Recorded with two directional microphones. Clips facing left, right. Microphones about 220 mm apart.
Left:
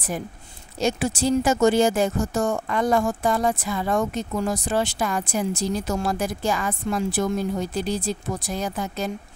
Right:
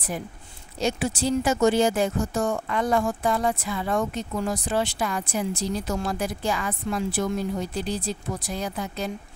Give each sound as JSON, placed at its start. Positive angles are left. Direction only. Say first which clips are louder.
{"t": 0.7, "sound": "speech", "louder": "left 2 dB", "side_deg": 45}
{"t": 8.5, "sound": "speech", "louder": "left 3 dB", "side_deg": 45}